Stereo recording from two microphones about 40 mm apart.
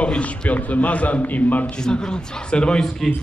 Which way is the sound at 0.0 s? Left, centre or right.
Left.